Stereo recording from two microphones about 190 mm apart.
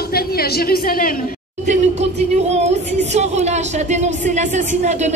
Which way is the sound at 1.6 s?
35° right (ahead or behind).